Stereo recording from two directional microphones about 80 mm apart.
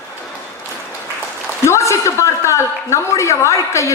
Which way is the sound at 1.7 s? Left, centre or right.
Left.